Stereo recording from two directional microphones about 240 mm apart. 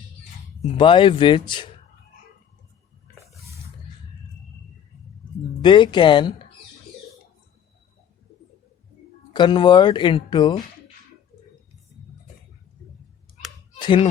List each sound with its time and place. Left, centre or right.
0.6 s speech: left
5.6 s speech: centre
9.3 s speech: centre
13.7 s honk: centre